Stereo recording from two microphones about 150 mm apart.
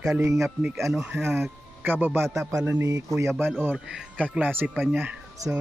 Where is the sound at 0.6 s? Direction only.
20° right (ahead or behind).